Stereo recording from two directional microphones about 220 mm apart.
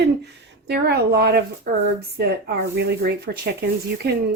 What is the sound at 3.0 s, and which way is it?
A woman's voice, 45° right (ahead or behind).